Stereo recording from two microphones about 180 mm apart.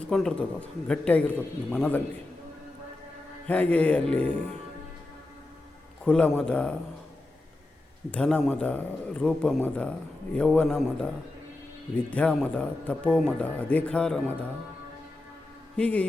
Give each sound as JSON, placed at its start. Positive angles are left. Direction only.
{"t": 0.0, "sound": "a man's voice", "side_deg": 5}
{"t": 3.4, "sound": "speech", "side_deg": 10}
{"t": 6.1, "sound": "a man's voice", "side_deg": 5}
{"t": 8.1, "sound": "a man's voice", "side_deg": 5}
{"t": 15.7, "sound": "speech", "side_deg": 5}